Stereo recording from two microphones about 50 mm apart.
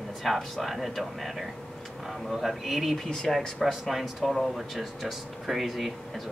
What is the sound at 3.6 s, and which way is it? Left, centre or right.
Speech, centre.